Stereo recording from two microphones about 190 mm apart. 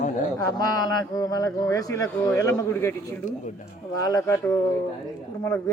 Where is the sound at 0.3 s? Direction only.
20° left (ahead or behind).